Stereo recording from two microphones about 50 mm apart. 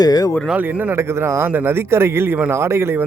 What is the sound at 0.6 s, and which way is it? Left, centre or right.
Speech, right.